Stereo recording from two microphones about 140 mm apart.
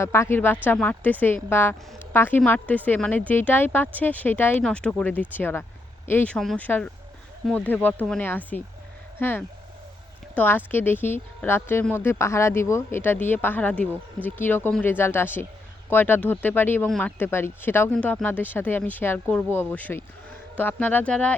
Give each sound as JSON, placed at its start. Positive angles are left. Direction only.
{"t": 0.0, "sound": "speech", "side_deg": 20}